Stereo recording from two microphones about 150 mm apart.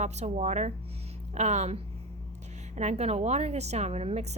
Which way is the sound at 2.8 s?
45° right (ahead or behind).